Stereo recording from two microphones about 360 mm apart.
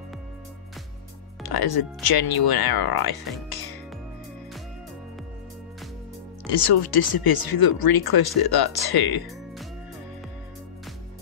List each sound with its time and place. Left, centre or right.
1.4 s speech: left
6.5 s speech: left